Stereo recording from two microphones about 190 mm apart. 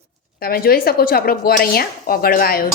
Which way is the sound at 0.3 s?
50° left (ahead or behind).